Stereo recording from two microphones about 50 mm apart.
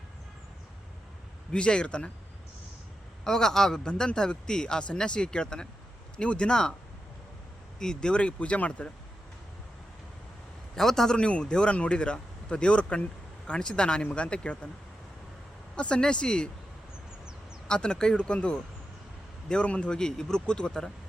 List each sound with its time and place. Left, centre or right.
1.5 s speech: left
3.2 s speech: centre
7.8 s speech: centre
10.8 s speech: centre; by 14.7 s left
15.7 s speech: centre
17.7 s speech: centre
20.0 s speech: centre